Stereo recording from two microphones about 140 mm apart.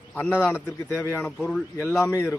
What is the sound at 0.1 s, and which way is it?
A man's voice, 15° left (ahead or behind).